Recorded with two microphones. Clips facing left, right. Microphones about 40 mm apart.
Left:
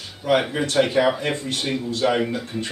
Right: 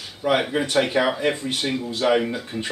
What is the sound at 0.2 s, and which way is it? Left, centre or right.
Speech, centre.